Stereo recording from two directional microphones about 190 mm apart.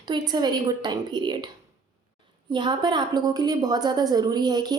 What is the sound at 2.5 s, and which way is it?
A woman's voice, 25° right (ahead or behind).